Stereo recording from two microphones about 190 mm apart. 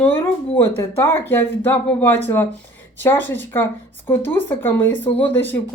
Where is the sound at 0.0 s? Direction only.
10° left (ahead or behind).